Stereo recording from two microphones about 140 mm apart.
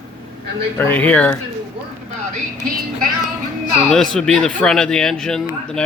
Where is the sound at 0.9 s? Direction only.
10° left (ahead or behind).